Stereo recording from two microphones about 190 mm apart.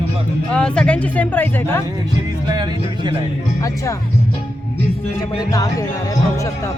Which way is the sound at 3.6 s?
15° left (ahead or behind).